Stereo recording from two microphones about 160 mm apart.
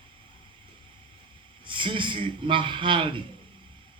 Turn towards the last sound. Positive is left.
turn(degrees=-30)  # may be behind; listen again after turning